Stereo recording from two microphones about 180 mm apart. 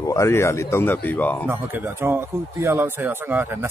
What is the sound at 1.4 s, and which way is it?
Speech, 10° right (ahead or behind).